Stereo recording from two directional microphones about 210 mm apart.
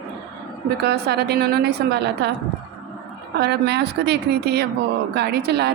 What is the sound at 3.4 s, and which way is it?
A woman's voice, 50° right (ahead or behind).